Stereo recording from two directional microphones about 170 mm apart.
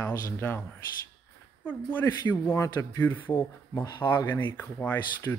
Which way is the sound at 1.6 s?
10° left (ahead or behind).